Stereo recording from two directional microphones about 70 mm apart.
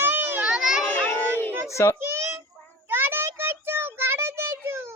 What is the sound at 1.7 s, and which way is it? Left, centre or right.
Speech, left.